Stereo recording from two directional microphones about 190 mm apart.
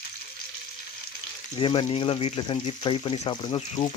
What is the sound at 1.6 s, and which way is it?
Speech, 25° left (ahead or behind).